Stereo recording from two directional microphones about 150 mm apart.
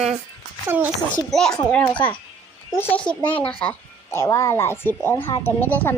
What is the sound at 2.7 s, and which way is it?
A child's voice, 10° left (ahead or behind).